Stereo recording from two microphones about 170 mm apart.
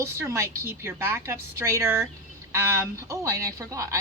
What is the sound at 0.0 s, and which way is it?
Speech, 15° right (ahead or behind).